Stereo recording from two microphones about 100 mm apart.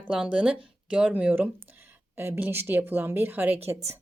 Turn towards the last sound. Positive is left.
turn(degrees=-20)  # may be behind; listen again after turning